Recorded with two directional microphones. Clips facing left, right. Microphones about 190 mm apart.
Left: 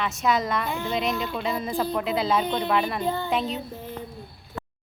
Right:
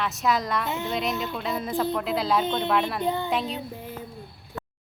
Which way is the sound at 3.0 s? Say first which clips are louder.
Right 1 dB; 20° right (ahead or behind).